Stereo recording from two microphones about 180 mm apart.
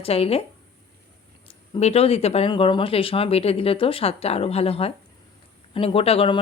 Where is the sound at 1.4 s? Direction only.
35° left (ahead or behind).